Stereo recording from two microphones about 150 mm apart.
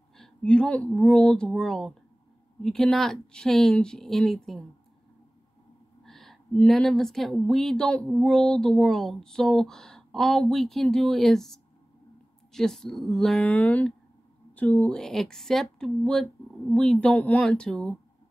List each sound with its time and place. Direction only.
0.2 s speech: 5° left (ahead or behind)
6.0 s speech: centre (ahead or behind)